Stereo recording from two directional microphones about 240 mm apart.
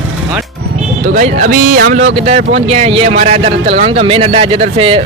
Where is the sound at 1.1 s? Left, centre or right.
Right.